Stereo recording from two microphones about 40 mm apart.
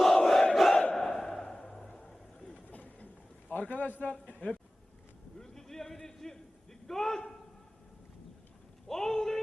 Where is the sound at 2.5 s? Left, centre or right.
Left.